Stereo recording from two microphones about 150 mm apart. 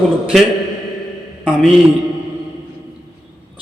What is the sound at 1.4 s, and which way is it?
Speech, 5° right (ahead or behind).